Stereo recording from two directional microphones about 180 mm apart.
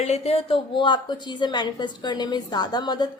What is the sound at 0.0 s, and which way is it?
A woman's voice, 35° left (ahead or behind).